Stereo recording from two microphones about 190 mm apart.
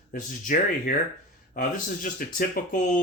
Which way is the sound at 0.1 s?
45° left (ahead or behind).